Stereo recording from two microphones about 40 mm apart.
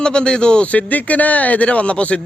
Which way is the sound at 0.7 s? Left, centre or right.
Left.